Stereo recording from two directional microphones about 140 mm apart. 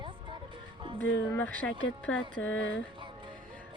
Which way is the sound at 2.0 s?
10° left (ahead or behind).